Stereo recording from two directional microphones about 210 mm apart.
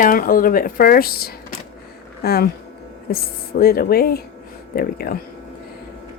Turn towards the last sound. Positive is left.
turn(degrees=45)  # may be behind; listen again after turning